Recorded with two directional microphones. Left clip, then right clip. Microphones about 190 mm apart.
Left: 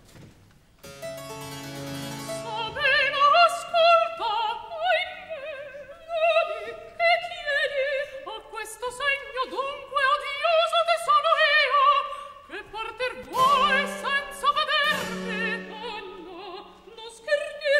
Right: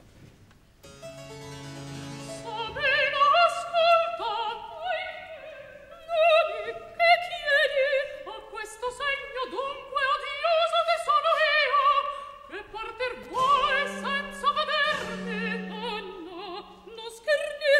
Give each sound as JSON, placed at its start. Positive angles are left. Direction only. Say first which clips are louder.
{"t": 1.7, "sound": "music", "louder": "left 5 dB", "side_deg": 40}
{"t": 2.4, "sound": "opera", "louder": "left 2 dB", "side_deg": 15}
{"t": 6.0, "sound": "opera", "louder": "right 2 dB", "side_deg": -15}
{"t": 8.3, "sound": "music", "louder": "left 2 dB", "side_deg": 10}
{"t": 15.7, "sound": "opera", "louder": "right 1 dB", "side_deg": -15}